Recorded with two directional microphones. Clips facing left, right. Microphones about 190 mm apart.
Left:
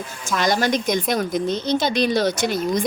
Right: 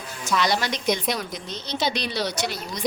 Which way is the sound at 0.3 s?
45° left (ahead or behind).